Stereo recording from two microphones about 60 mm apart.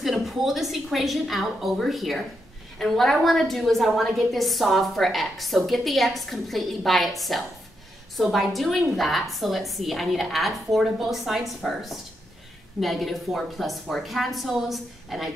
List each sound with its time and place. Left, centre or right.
0.0 s a woman's voice: centre